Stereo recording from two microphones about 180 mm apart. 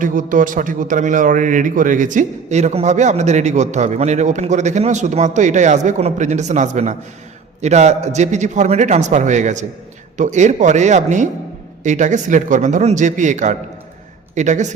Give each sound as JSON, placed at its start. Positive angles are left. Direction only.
{"t": 0.0, "sound": "a man's voice", "side_deg": -45}